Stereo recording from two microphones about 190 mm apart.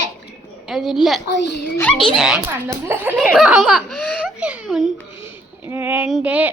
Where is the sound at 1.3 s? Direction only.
65° left (ahead or behind).